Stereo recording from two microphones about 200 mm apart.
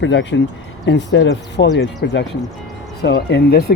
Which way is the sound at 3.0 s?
55° left (ahead or behind).